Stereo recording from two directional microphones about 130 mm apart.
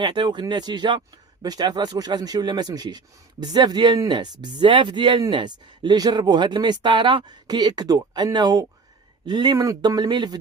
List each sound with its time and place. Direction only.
0.0 s speech: 35° right (ahead or behind)